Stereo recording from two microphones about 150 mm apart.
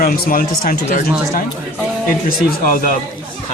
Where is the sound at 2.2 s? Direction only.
70° left (ahead or behind).